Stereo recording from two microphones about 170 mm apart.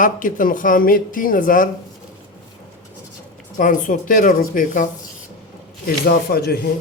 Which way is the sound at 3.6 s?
50° left (ahead or behind).